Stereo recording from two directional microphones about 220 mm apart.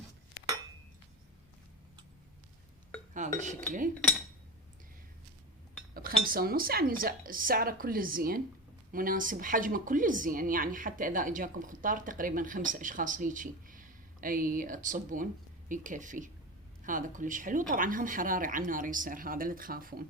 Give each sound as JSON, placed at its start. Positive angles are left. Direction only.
{"t": 3.2, "sound": "speech", "side_deg": -35}
{"t": 5.9, "sound": "speech", "side_deg": -40}